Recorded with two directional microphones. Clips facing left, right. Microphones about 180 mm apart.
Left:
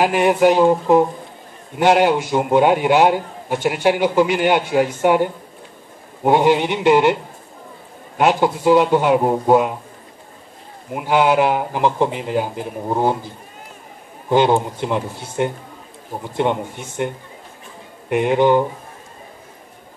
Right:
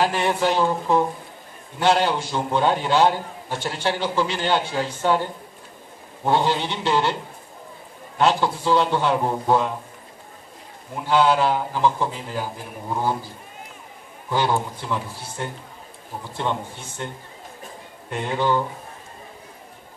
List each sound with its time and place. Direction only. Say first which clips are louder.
0.0 s a man's voice: left 7 dB; 15° left (ahead or behind)
8.2 s a man's voice: left 4 dB; 15° left (ahead or behind)
11.0 s a man's voice: left 3 dB; 15° left (ahead or behind)
14.3 s a man's voice: left 7 dB; 20° left (ahead or behind)
18.1 s a man's voice: left 8 dB; 15° left (ahead or behind)